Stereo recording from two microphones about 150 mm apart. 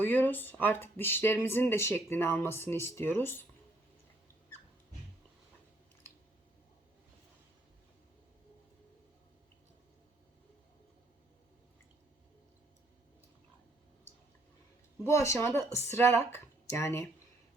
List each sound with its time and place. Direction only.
0.0 s speech: 10° left (ahead or behind)
15.0 s speech: 20° left (ahead or behind)